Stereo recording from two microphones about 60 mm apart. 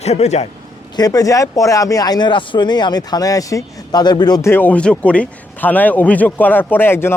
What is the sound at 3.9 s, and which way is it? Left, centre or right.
Speech, left.